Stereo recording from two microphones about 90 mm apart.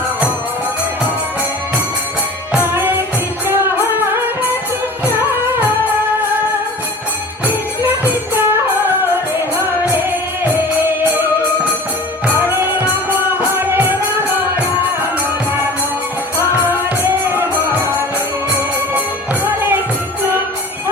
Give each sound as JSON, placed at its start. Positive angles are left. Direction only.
{"t": 2.6, "sound": "music", "side_deg": -25}
{"t": 7.8, "sound": "music", "side_deg": -25}
{"t": 12.3, "sound": "music", "side_deg": -25}
{"t": 16.6, "sound": "music", "side_deg": -25}